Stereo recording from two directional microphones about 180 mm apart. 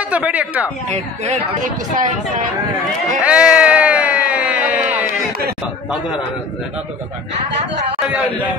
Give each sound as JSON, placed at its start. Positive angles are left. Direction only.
{"t": 0.1, "sound": "speech", "side_deg": -10}
{"t": 0.8, "sound": "speech", "side_deg": -35}
{"t": 3.2, "sound": "a sound", "side_deg": -5}
{"t": 5.9, "sound": "a man's voice", "side_deg": -5}